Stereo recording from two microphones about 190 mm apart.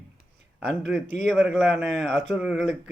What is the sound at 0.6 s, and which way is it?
Speech, 5° right (ahead or behind).